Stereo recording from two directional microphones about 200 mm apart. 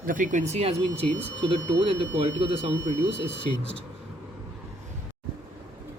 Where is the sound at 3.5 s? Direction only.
35° right (ahead or behind).